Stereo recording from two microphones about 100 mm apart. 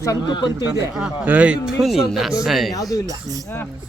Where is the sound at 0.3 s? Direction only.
50° left (ahead or behind).